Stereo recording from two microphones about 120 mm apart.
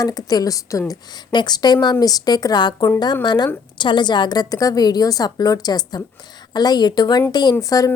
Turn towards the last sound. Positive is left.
turn(degrees=30)  # may be behind; listen again after turning